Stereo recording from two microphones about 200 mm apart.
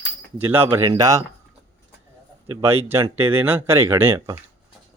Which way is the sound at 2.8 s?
10° right (ahead or behind).